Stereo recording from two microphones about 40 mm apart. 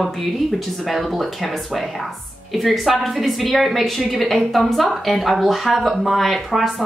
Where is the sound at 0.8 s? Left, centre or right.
Centre.